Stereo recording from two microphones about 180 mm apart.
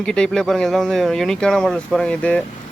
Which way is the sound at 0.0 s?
5° left (ahead or behind).